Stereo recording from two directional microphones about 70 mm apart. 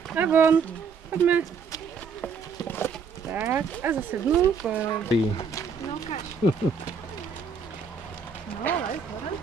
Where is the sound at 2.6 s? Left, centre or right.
Left.